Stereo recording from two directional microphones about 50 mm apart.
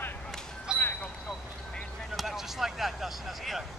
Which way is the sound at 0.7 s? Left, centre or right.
Centre.